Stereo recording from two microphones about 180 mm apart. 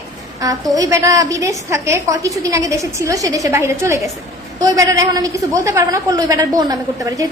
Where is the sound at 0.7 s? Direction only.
20° right (ahead or behind).